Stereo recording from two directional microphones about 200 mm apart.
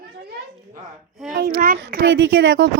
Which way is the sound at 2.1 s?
65° right (ahead or behind).